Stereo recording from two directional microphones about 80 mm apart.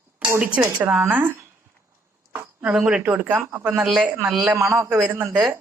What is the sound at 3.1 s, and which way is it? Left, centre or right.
Speech, centre.